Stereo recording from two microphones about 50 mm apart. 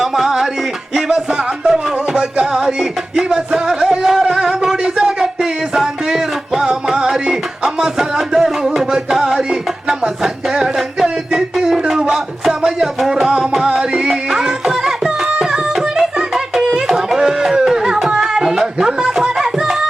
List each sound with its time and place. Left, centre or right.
0.0 s music: centre
3.2 s a sound: centre
8.4 s music: centre